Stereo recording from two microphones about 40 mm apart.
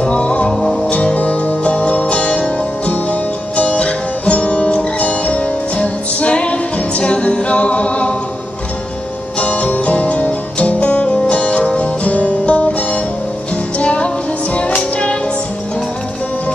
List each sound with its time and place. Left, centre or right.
0.0 s music: left
0.5 s music: centre
0.8 s music: left
9.4 s music: left